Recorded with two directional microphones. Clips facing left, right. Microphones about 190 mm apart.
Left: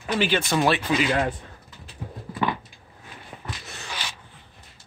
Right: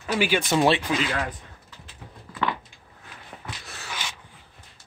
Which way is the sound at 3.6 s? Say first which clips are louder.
Left 1 dB; centre (ahead or behind).